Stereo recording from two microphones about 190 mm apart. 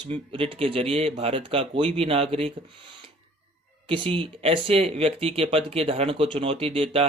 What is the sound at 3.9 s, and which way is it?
Speech, 30° right (ahead or behind).